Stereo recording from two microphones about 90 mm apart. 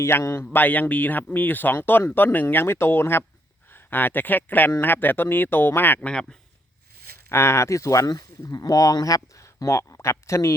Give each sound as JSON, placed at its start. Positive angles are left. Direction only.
{"t": 0.0, "sound": "a man's voice", "side_deg": 30}
{"t": 7.3, "sound": "speech", "side_deg": 30}